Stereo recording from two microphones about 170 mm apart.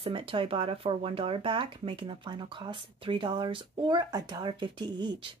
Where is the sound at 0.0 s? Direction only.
35° right (ahead or behind).